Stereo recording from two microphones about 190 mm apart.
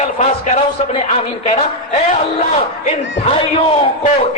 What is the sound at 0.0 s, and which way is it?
A man's voice, 40° left (ahead or behind).